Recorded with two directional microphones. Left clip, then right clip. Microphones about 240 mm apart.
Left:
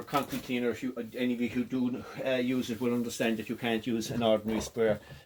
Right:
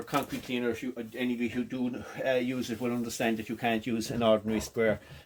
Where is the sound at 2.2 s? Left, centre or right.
Right.